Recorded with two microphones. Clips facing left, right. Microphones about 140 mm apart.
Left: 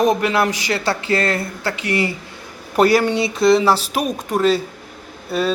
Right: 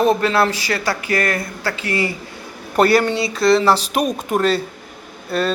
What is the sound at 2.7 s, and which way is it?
Speech, 10° left (ahead or behind).